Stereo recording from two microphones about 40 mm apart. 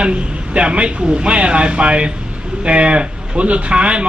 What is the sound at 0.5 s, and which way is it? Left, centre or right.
A man's voice, right.